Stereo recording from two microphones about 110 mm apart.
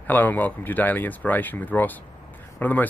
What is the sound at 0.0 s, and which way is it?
Speech, 15° left (ahead or behind).